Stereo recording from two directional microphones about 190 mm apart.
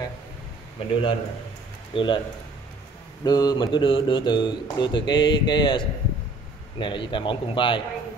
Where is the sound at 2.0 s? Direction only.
25° left (ahead or behind).